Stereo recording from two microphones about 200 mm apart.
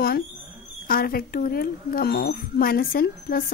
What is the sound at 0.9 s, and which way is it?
A woman's voice, 45° left (ahead or behind).